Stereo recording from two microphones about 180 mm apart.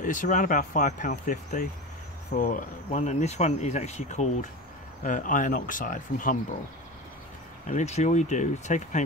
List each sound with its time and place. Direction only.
0.0 s speech: 45° left (ahead or behind)
7.6 s speech: 40° left (ahead or behind)